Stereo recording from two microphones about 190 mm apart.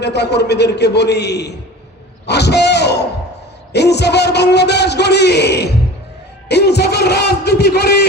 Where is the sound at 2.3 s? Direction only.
60° left (ahead or behind).